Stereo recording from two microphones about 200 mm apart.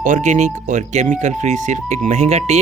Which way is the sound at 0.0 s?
40° right (ahead or behind).